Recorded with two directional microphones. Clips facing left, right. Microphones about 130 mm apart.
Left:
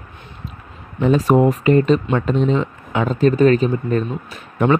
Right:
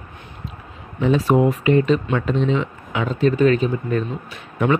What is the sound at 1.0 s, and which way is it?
Speech, 45° left (ahead or behind).